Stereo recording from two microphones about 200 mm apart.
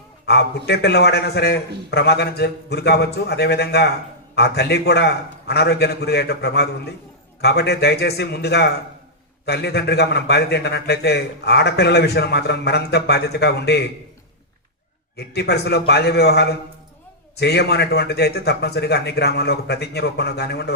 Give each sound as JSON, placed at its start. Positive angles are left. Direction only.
{"t": 0.3, "sound": "a man's voice", "side_deg": 55}
{"t": 15.1, "sound": "a man's voice", "side_deg": 55}